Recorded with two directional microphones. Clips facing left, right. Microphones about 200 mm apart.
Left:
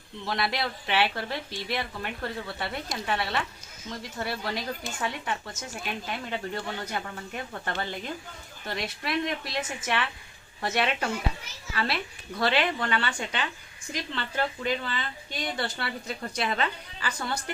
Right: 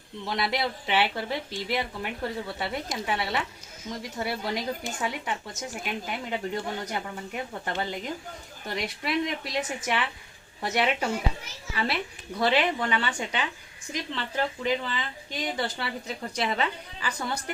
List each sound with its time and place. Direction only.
0.3 s a woman's voice: 15° right (ahead or behind)